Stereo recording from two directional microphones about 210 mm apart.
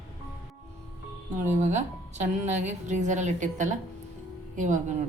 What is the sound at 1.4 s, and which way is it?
A woman's voice, 35° right (ahead or behind).